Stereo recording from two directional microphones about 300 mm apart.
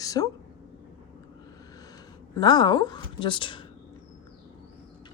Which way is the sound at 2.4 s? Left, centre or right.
Centre.